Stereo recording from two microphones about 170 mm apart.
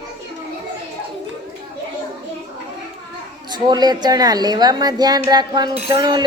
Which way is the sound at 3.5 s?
25° right (ahead or behind).